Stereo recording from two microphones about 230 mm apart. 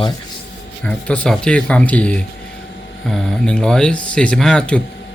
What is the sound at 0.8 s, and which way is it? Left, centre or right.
Speech, centre.